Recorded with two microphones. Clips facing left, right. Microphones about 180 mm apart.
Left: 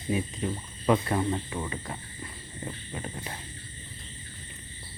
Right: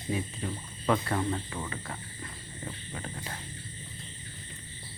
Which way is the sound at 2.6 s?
20° left (ahead or behind).